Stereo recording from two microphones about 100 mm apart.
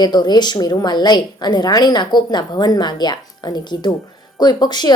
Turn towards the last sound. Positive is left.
turn(degrees=45)  # may be behind; listen again after turning